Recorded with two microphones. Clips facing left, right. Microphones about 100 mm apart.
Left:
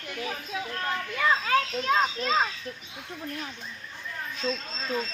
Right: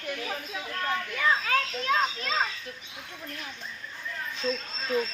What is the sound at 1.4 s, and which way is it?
Children playing, 30° left (ahead or behind).